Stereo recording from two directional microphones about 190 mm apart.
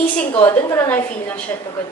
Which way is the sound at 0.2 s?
10° left (ahead or behind).